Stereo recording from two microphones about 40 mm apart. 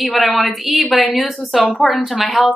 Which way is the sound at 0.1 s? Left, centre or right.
Centre.